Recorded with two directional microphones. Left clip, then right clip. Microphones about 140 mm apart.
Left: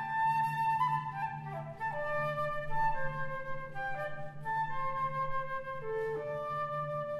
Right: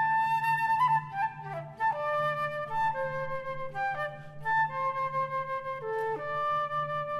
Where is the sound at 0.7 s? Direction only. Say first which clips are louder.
Right 6 dB; 45° right (ahead or behind).